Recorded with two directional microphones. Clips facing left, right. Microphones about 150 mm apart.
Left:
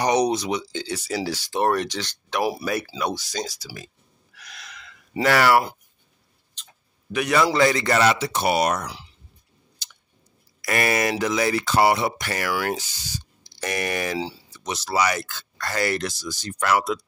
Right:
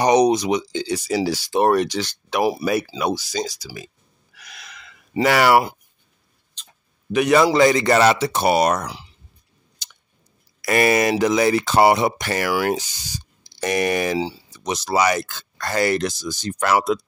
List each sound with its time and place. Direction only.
0.0 s speech: 20° right (ahead or behind); by 3.9 s centre (ahead or behind)
4.4 s gasp: centre (ahead or behind)
5.2 s speech: 15° right (ahead or behind)
7.1 s speech: 25° right (ahead or behind)
8.0 s speech: 35° right (ahead or behind)
10.6 s speech: 25° right (ahead or behind)